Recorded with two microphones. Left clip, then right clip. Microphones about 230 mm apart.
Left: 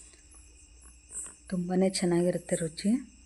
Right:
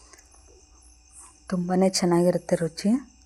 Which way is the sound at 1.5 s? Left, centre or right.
Centre.